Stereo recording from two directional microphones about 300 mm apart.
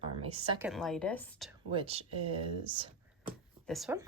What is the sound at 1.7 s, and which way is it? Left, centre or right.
Speech, centre.